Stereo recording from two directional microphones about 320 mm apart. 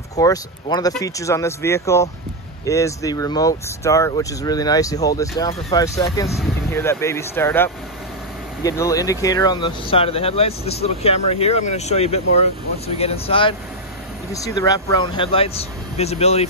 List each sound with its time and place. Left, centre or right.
0.1 s speech: centre